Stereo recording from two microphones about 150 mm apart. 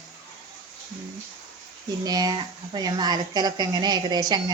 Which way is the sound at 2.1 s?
25° right (ahead or behind).